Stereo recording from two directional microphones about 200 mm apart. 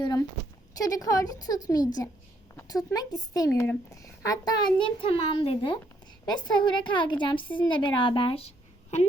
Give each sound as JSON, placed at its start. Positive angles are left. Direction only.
{"t": 0.0, "sound": "a sound", "side_deg": 20}
{"t": 0.8, "sound": "a woman's voice", "side_deg": 20}
{"t": 7.4, "sound": "a woman's voice", "side_deg": 10}
{"t": 7.7, "sound": "a woman's voice", "side_deg": 25}